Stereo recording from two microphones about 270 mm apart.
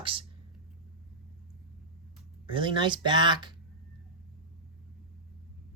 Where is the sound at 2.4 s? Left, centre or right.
Centre.